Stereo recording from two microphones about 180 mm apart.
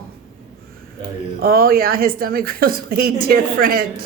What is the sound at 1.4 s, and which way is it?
A woman's voice, 55° right (ahead or behind).